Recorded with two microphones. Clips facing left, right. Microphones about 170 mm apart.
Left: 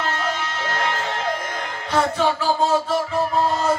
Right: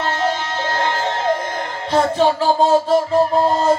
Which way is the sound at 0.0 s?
30° right (ahead or behind).